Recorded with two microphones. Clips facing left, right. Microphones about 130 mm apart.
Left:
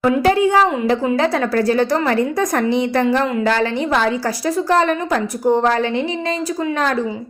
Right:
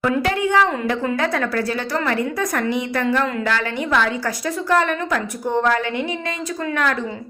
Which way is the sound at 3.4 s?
35° left (ahead or behind).